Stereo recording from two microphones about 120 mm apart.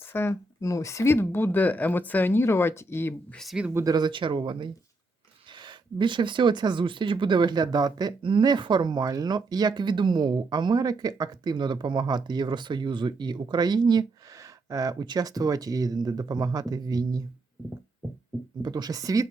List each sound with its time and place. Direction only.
0.0 s speech: 20° left (ahead or behind)
3.3 s speech: centre (ahead or behind)
3.8 s speech: 35° right (ahead or behind)
18.6 s speech: 35° right (ahead or behind)